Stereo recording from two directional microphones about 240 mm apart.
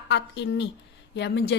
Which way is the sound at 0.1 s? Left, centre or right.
Left.